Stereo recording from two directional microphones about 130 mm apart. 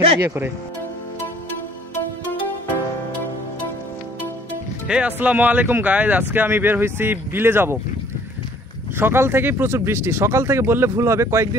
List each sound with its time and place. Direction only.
0.2 s speech: 15° right (ahead or behind)
4.8 s speech: 10° right (ahead or behind)
8.9 s speech: 20° right (ahead or behind)